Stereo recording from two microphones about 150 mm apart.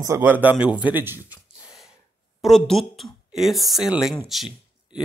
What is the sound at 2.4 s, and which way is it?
Speech, centre (ahead or behind).